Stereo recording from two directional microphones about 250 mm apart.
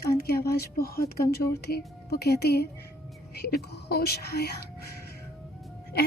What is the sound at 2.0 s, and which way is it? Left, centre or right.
Speech, left.